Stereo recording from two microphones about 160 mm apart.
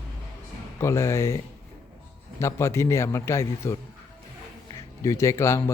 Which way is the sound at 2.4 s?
15° left (ahead or behind).